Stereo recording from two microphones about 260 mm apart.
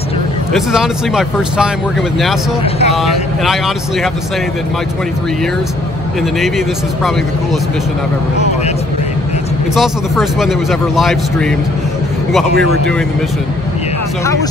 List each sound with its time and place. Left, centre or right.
0.5 s speech: centre
2.6 s speech: left
3.0 s speech: centre
9.8 s speech: centre
12.5 s speech: right